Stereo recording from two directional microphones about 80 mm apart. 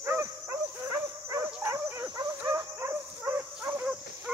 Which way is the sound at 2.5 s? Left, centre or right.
Right.